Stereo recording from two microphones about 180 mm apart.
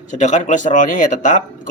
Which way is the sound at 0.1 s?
40° left (ahead or behind).